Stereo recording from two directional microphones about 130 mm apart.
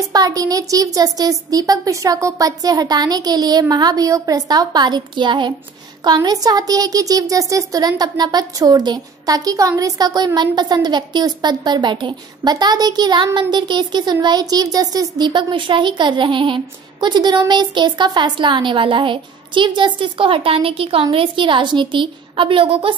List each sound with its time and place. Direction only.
0.1 s a woman's voice: 30° right (ahead or behind)